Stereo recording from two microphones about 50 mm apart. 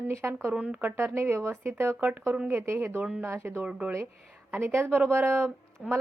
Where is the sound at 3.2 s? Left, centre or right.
Right.